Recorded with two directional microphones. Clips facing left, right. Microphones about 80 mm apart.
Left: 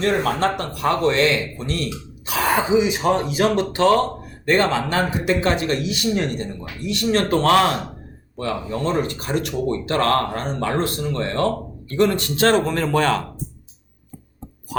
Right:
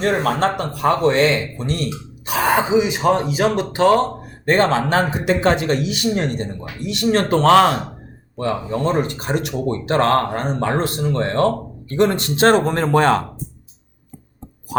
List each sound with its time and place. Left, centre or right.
0.0 s speech: right